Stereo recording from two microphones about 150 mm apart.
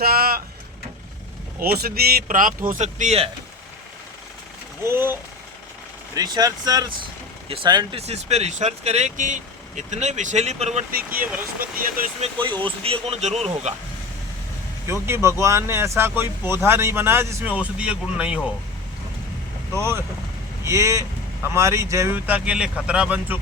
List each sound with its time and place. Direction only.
0.0 s speech: 85° right
1.5 s speech: 85° right; by 3.2 s 50° right (ahead or behind)
4.9 s speech: 15° right (ahead or behind)
6.1 s speech: 25° right (ahead or behind)
7.9 s speech: 45° right (ahead or behind)
10.9 s speech: 75° right (ahead or behind)
12.2 s speech: 30° right (ahead or behind); by 13.7 s 50° right (ahead or behind)
15.0 s speech: 20° right (ahead or behind)
19.7 s speech: 15° right (ahead or behind)